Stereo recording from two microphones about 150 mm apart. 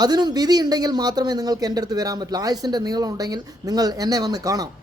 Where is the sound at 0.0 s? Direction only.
25° right (ahead or behind).